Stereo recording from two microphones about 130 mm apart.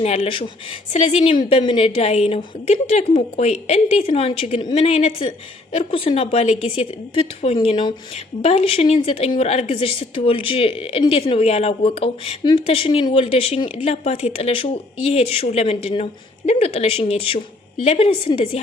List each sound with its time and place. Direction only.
0.0 s a woman's voice: 50° left (ahead or behind)